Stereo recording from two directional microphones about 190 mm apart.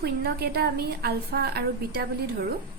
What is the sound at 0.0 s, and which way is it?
A woman's voice, 55° right (ahead or behind).